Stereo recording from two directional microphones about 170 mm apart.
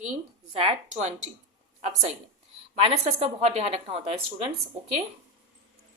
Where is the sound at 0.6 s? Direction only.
40° right (ahead or behind).